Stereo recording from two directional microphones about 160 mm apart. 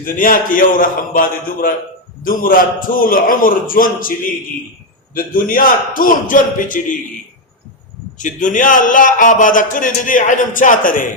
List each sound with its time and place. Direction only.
0.0 s a man's voice: 60° left (ahead or behind)
5.1 s a man's voice: 60° left (ahead or behind)
8.2 s a man's voice: 55° left (ahead or behind)